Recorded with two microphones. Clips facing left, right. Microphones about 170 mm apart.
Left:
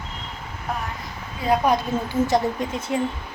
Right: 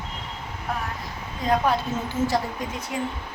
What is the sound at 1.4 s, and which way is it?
A woman's voice, 15° left (ahead or behind).